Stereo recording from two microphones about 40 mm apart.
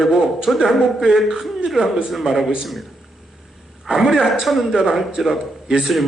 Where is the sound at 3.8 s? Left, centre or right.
Centre.